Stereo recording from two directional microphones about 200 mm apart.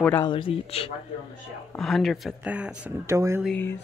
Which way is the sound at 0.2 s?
25° left (ahead or behind).